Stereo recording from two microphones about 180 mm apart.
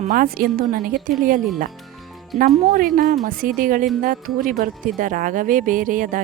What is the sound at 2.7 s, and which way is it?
A woman's voice, 50° right (ahead or behind).